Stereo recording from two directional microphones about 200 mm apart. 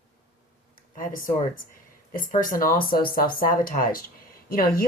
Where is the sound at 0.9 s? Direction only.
45° left (ahead or behind).